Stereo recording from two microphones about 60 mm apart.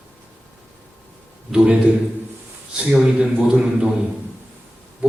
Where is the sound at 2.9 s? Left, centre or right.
Centre.